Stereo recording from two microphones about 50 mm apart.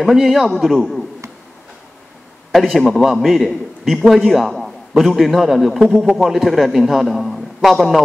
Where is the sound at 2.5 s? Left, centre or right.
Centre.